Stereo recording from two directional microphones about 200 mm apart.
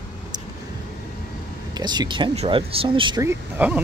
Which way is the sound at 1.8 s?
20° right (ahead or behind).